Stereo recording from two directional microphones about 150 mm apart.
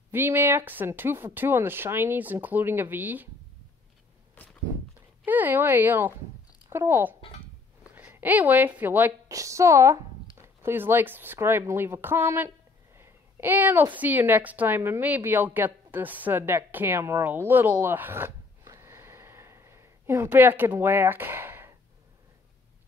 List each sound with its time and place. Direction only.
0.1 s speech: 15° right (ahead or behind)
4.4 s walk: 10° left (ahead or behind)
5.2 s a woman's voice: 10° right (ahead or behind)